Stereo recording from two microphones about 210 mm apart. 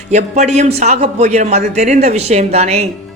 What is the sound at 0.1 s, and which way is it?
A man's voice, 35° right (ahead or behind).